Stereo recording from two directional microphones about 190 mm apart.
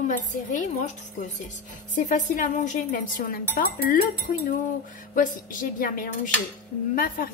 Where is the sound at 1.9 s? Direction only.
40° left (ahead or behind).